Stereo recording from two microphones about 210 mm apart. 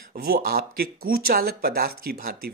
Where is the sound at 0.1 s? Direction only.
45° right (ahead or behind).